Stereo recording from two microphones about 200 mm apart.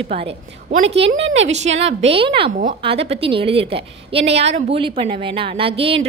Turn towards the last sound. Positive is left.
turn(degrees=-25)  # may be behind; listen again after turning